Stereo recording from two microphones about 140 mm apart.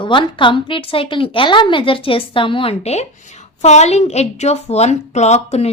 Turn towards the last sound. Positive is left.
turn(degrees=50)  # may be behind; listen again after turning